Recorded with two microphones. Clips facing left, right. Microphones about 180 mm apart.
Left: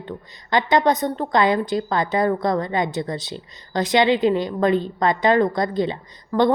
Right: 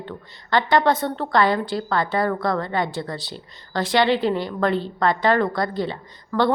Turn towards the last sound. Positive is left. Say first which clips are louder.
# left 2 dB
turn(degrees=20)  # may be behind; listen again after turning